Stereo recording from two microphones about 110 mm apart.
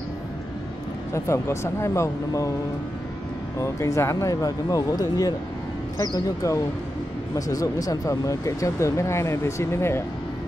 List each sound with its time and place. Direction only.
1.1 s speech: 25° left (ahead or behind)
3.6 s speech: 25° left (ahead or behind)